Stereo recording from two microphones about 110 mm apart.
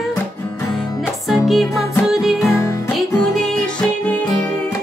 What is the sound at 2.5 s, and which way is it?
Music, 25° left (ahead or behind).